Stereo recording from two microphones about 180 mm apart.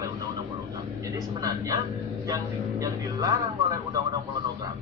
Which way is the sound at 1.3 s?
20° right (ahead or behind).